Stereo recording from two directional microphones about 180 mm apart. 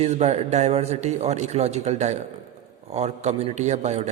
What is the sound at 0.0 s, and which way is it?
A man's voice, 35° right (ahead or behind).